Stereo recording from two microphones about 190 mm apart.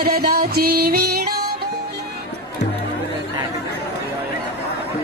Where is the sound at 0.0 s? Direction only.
55° right (ahead or behind).